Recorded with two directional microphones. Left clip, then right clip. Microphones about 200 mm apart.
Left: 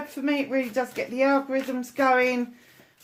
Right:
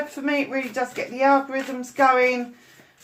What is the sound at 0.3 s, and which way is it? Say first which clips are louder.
Speech: right 1 dB; 40° left (ahead or behind).